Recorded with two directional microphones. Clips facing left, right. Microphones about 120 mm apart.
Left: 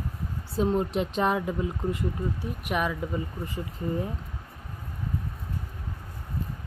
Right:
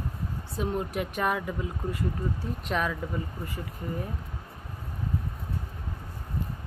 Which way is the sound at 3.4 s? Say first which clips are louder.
Left 4 dB; 20° left (ahead or behind).